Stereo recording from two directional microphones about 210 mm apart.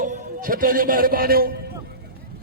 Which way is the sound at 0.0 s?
40° right (ahead or behind).